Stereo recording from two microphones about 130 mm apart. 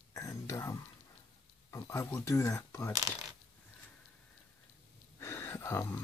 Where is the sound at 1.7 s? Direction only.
20° left (ahead or behind).